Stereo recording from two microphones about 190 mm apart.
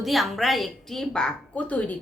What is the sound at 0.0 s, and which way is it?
A woman's voice, centre (ahead or behind).